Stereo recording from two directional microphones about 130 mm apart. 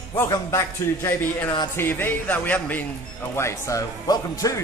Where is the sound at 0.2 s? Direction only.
25° left (ahead or behind).